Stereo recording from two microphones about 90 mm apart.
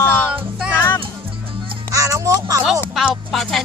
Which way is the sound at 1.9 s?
40° right (ahead or behind).